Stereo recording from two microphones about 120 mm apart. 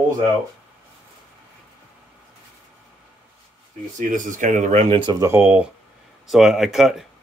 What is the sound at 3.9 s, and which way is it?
Speech, 90° right.